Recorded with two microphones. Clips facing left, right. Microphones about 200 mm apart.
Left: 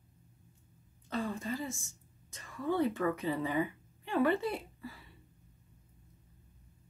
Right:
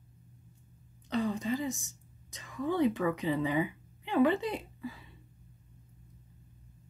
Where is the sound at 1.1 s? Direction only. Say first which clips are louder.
Right 5 dB; 20° right (ahead or behind).